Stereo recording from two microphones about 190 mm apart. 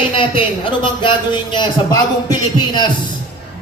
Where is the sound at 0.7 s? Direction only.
25° left (ahead or behind).